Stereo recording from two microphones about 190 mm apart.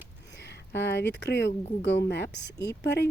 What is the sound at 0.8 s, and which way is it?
A woman's voice, 65° left (ahead or behind).